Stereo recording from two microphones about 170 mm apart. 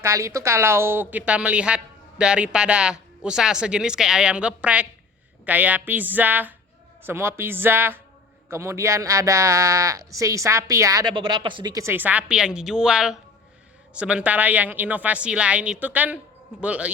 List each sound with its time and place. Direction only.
0.0 s a woman's voice: 15° right (ahead or behind)
11.1 s a woman's voice: 30° right (ahead or behind); by 16.9 s 5° right (ahead or behind)